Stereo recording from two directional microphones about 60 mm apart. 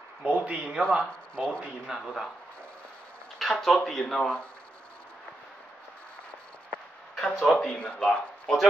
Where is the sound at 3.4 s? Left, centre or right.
Centre.